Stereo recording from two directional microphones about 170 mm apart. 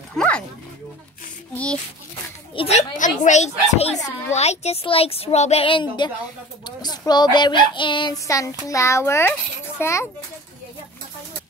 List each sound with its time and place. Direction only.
0.1 s dog: 5° left (ahead or behind)
1.5 s a child's voice: 5° left (ahead or behind)
2.5 s speech: 35° left (ahead or behind)
3.0 s a child's voice: 45° left (ahead or behind); by 10.0 s 15° left (ahead or behind)